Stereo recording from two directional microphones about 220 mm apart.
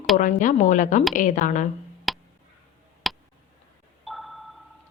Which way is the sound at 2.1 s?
Centre (ahead or behind).